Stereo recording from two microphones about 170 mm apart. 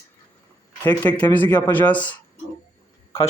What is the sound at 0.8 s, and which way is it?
Speech, 15° left (ahead or behind).